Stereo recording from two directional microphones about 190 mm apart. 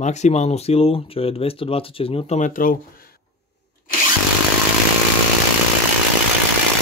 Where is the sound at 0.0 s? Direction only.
35° left (ahead or behind).